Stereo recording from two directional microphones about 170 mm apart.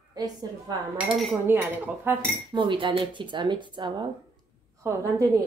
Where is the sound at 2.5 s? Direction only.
30° right (ahead or behind).